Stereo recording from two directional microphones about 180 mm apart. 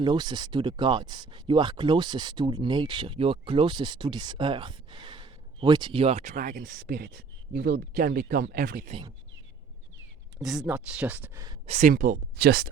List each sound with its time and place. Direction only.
0.0 s speech: 25° right (ahead or behind); by 8.9 s 50° right (ahead or behind)
8.9 s speech: 30° right (ahead or behind)
10.4 s speech: centre (ahead or behind)
11.6 s speech: 40° right (ahead or behind); by 12.7 s 60° right (ahead or behind)